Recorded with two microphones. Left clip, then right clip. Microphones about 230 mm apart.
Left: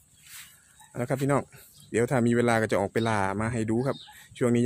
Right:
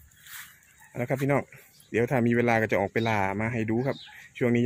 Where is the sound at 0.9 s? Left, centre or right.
Centre.